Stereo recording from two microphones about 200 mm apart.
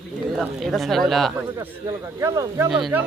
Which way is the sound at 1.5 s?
15° right (ahead or behind).